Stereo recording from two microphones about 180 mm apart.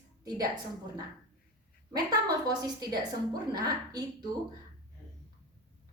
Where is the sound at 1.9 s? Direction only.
20° right (ahead or behind).